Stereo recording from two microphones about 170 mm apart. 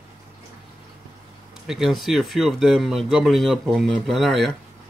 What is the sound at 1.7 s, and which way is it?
Speech, centre (ahead or behind).